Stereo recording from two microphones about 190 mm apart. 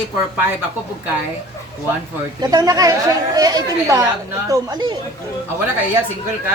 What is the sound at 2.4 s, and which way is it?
A woman's voice, 20° right (ahead or behind).